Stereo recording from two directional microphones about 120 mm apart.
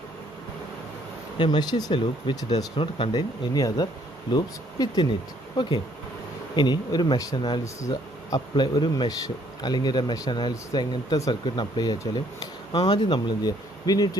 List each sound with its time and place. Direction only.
1.4 s speech: 40° left (ahead or behind)
3.2 s speech: 35° left (ahead or behind)
7.6 s speech: 30° left (ahead or behind)